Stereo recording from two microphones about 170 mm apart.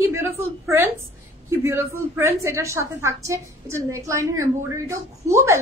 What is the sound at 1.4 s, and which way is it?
A woman's voice, 15° right (ahead or behind).